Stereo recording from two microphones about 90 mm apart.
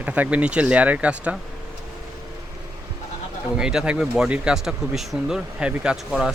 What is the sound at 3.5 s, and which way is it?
Speech, 10° right (ahead or behind).